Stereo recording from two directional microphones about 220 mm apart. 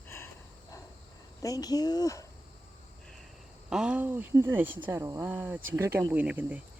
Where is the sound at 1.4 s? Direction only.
15° left (ahead or behind).